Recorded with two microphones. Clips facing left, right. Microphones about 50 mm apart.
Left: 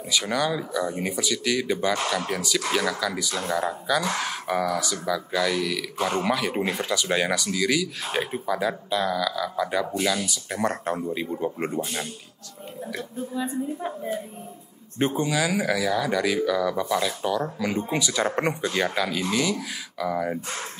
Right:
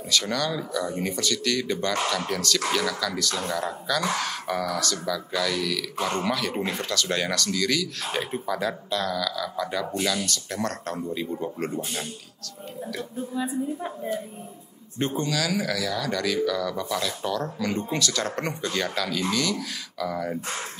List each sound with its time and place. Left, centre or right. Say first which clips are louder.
0.1 s a man's voice: left 2 dB; centre
13.3 s a woman's voice: even; centre
15.0 s speech: left 3 dB; centre